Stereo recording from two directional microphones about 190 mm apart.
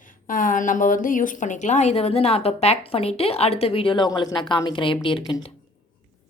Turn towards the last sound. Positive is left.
turn(degrees=25)  # may be behind; listen again after turning